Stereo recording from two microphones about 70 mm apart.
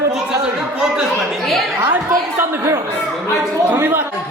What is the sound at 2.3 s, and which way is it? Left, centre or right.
Chatter, right.